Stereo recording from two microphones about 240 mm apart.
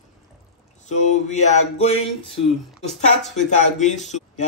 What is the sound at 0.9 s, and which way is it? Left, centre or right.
A man's voice, left.